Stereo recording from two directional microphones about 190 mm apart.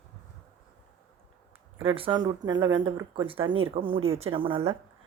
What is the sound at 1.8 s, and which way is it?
Speech, 30° right (ahead or behind).